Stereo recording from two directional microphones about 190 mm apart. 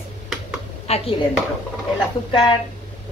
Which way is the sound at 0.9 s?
35° left (ahead or behind).